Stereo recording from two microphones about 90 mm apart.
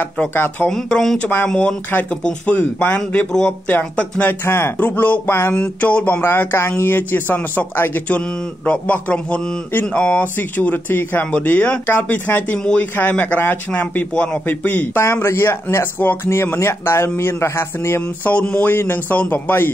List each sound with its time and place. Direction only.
0.0 s speech: 20° left (ahead or behind)
0.7 s a man's voice: 5° left (ahead or behind); by 5.5 s 25° left (ahead or behind)
5.5 s a man's voice: 15° left (ahead or behind)
15.0 s speech: 30° left (ahead or behind)
18.3 s speech: 15° left (ahead or behind)